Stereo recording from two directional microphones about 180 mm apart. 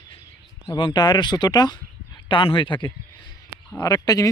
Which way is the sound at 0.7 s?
25° left (ahead or behind).